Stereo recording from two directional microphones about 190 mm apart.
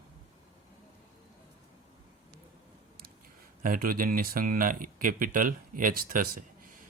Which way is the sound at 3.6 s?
45° right (ahead or behind).